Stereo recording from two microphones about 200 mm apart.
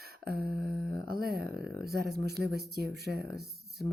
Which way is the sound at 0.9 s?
50° right (ahead or behind).